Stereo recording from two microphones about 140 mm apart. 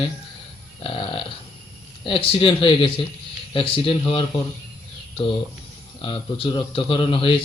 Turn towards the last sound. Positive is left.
turn(degrees=40)  # may be behind; listen again after turning